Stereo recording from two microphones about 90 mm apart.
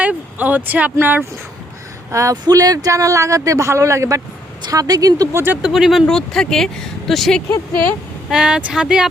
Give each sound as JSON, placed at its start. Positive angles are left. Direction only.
{"t": 0.0, "sound": "speech", "side_deg": -15}
{"t": 2.0, "sound": "speech", "side_deg": -35}
{"t": 2.3, "sound": "speech", "side_deg": -45}
{"t": 5.6, "sound": "speech", "side_deg": -5}
{"t": 8.3, "sound": "speech", "side_deg": -10}